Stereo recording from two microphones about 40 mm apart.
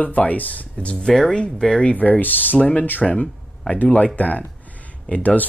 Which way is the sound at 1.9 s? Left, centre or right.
Left.